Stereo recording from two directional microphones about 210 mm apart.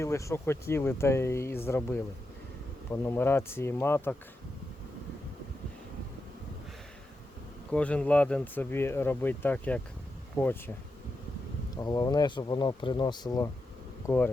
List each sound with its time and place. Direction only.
0.0 s speech: 15° left (ahead or behind)
7.7 s speech: 5° left (ahead or behind)
11.7 s speech: 20° left (ahead or behind)